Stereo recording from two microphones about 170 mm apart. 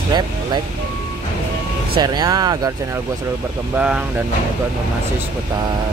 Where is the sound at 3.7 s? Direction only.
5° right (ahead or behind).